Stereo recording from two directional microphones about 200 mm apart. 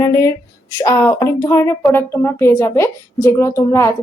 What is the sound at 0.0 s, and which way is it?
A woman's voice, 15° left (ahead or behind).